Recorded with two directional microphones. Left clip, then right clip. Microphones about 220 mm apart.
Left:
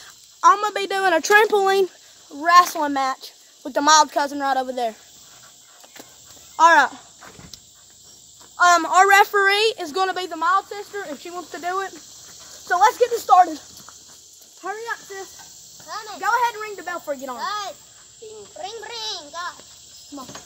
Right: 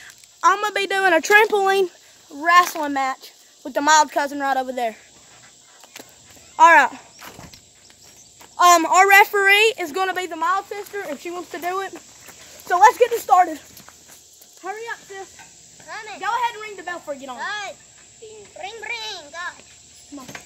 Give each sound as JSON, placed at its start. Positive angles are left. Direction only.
{"t": 0.4, "sound": "speech", "side_deg": -10}
{"t": 6.5, "sound": "speech", "side_deg": -20}
{"t": 8.5, "sound": "a woman's voice", "side_deg": -35}
{"t": 15.9, "sound": "speech", "side_deg": -15}
{"t": 16.2, "sound": "speech", "side_deg": 10}
{"t": 17.4, "sound": "speech", "side_deg": -10}